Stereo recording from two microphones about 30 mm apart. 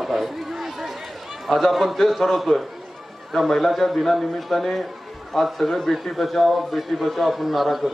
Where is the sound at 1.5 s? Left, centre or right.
Centre.